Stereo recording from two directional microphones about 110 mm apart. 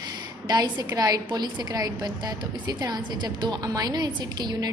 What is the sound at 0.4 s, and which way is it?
A woman's voice, 40° right (ahead or behind).